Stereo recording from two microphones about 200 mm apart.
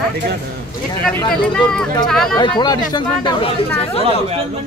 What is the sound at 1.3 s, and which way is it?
Speech, 5° left (ahead or behind).